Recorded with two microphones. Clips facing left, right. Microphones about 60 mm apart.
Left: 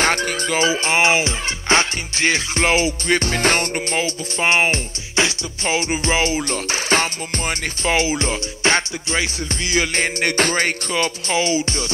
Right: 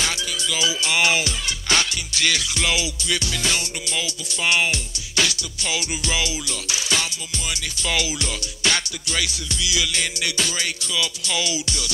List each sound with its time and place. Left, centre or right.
0.0 s music: left